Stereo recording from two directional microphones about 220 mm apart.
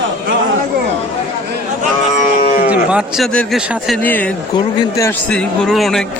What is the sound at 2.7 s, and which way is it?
A man's voice, 5° right (ahead or behind).